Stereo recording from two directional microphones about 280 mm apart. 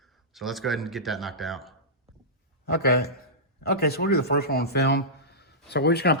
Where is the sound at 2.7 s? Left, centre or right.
Left.